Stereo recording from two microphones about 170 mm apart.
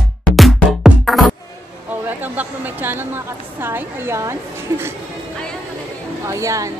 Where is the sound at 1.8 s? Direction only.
10° right (ahead or behind).